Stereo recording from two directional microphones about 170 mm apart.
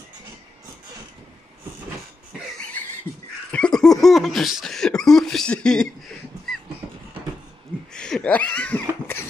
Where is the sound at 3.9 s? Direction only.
Centre (ahead or behind).